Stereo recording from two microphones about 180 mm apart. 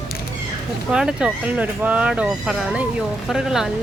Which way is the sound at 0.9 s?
5° right (ahead or behind).